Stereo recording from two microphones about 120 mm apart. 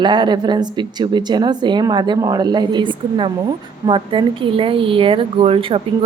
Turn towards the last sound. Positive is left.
turn(degrees=-50)  # may be behind; listen again after turning